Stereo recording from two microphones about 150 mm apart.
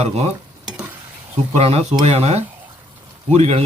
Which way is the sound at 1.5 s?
40° right (ahead or behind).